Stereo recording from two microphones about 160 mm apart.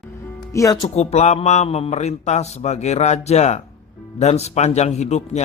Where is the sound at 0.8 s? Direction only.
45° left (ahead or behind).